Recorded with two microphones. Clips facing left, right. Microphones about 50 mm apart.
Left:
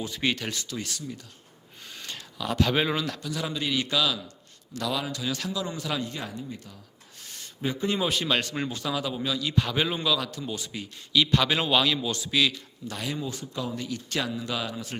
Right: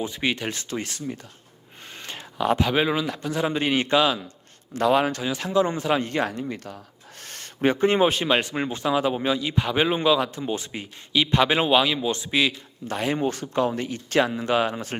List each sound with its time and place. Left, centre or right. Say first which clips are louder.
0.0 s speech: right 3 dB; right
1.8 s a sound: right 3 dB; right
2.6 s speech: right 3 dB; centre
3.2 s speech: right 7 dB; right
5.2 s speech: right 8 dB; right
6.1 s speech: right 10 dB; right
13.2 s speech: right 10 dB; right